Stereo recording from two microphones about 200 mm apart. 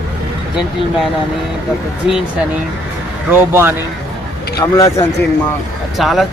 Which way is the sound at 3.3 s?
10° right (ahead or behind).